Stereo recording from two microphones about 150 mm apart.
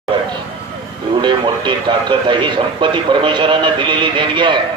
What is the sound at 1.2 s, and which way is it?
Speech, 30° right (ahead or behind).